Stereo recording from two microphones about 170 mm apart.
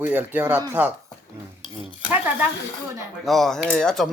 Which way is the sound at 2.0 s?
10° right (ahead or behind).